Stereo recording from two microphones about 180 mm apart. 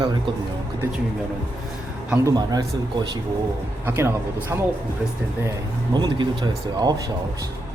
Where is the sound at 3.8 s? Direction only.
10° right (ahead or behind).